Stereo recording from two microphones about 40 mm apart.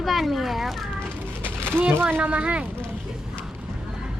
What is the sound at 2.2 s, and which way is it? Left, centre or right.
Speech, right.